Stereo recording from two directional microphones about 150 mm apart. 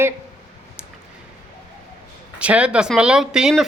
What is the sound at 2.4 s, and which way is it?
Speech, 10° right (ahead or behind).